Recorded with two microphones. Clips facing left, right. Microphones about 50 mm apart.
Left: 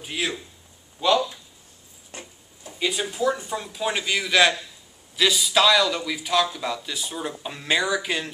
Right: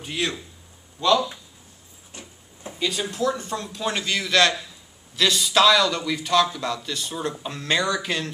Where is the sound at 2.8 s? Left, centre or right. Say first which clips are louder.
Left 1 dB; centre.